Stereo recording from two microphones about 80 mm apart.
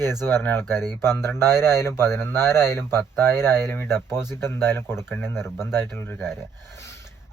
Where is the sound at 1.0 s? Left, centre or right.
Left.